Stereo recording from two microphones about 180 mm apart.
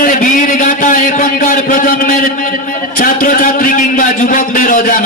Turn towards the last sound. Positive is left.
turn(degrees=50)  # may be behind; listen again after turning